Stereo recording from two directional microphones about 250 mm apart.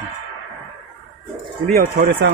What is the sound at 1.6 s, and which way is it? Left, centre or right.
Speech, right.